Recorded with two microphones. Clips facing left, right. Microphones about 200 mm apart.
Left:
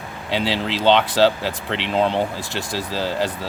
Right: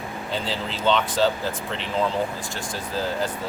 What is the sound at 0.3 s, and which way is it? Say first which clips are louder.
Speech: left 7 dB; 75° left (ahead or behind).